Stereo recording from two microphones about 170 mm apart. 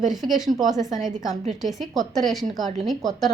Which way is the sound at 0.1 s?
Centre (ahead or behind).